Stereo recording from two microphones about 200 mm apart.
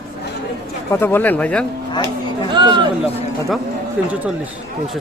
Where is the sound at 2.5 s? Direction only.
20° right (ahead or behind).